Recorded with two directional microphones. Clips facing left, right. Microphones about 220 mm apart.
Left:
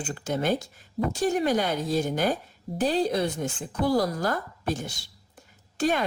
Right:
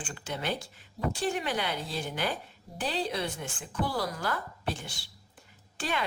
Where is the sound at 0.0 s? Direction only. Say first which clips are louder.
Left 8 dB; 40° left (ahead or behind).